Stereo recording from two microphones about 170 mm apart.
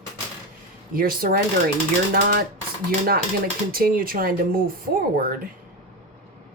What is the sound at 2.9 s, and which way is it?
Speech, 60° right (ahead or behind).